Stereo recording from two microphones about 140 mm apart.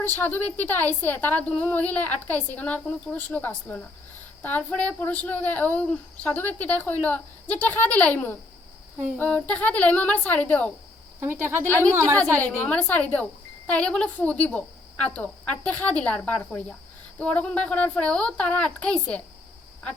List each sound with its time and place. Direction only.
0.0 s speech: 15° left (ahead or behind)
11.2 s speech: 15° right (ahead or behind)
12.4 s speech: 10° left (ahead or behind)